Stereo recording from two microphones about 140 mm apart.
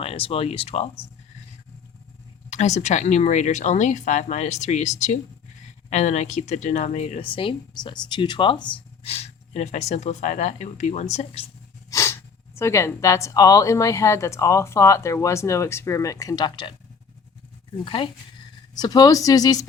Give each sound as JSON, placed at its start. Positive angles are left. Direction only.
{"t": 0.0, "sound": "speech", "side_deg": 45}
{"t": 2.5, "sound": "speech", "side_deg": 55}
{"t": 7.3, "sound": "speech", "side_deg": 40}
{"t": 9.0, "sound": "speech", "side_deg": 50}
{"t": 11.9, "sound": "speech", "side_deg": 20}
{"t": 17.8, "sound": "speech", "side_deg": 35}